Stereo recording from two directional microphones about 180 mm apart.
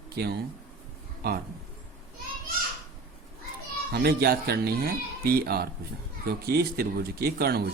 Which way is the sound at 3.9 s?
60° right (ahead or behind).